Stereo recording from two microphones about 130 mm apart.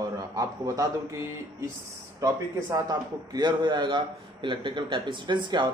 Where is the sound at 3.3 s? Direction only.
35° right (ahead or behind).